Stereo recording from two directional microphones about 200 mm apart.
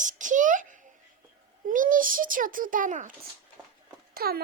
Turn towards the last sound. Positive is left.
turn(degrees=-50)  # may be behind; listen again after turning